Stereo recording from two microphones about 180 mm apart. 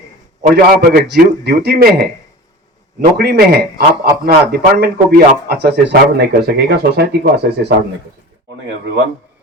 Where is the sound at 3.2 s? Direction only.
60° right (ahead or behind).